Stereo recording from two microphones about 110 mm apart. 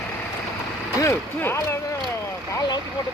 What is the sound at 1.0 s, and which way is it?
Speech, 25° left (ahead or behind).